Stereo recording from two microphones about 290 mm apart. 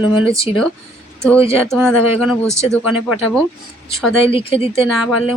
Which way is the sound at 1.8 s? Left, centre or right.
Centre.